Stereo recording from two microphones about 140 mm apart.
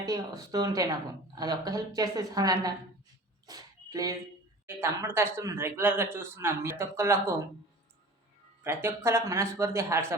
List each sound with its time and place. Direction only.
0.0 s speech: 25° right (ahead or behind)
3.4 s a sound: 25° right (ahead or behind)
4.6 s speech: 15° right (ahead or behind)
8.6 s speech: 20° right (ahead or behind)